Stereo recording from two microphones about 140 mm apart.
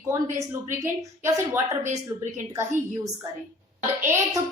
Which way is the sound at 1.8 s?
60° right (ahead or behind).